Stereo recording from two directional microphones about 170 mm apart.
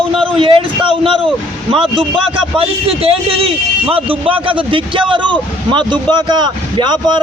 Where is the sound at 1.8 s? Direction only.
30° right (ahead or behind).